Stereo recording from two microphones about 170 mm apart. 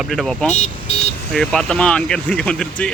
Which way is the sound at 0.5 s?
40° left (ahead or behind).